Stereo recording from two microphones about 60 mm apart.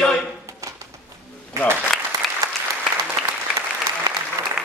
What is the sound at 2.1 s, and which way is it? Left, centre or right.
Applause, right.